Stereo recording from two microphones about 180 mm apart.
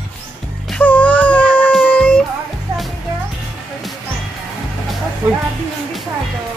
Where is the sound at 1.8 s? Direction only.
10° left (ahead or behind).